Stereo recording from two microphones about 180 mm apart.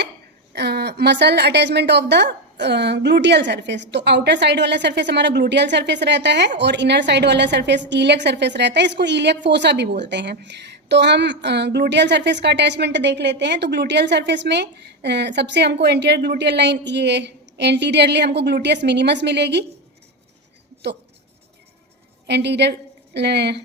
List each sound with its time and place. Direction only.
0.5 s a woman's voice: 65° right (ahead or behind)
22.3 s a woman's voice: 70° right (ahead or behind)